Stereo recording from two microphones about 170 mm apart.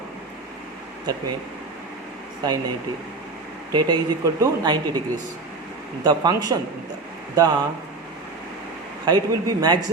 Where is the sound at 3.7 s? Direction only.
25° right (ahead or behind).